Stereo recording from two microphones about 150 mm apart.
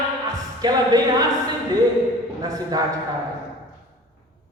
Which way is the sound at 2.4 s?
25° right (ahead or behind).